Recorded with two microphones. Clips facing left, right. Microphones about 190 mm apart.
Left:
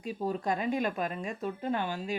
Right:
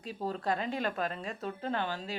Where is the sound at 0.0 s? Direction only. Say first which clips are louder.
Left 3 dB; 15° left (ahead or behind).